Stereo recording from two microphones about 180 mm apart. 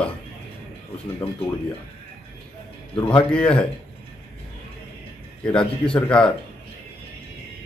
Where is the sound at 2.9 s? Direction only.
25° left (ahead or behind).